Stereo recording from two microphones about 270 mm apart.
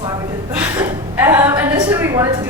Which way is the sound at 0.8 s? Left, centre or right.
Centre.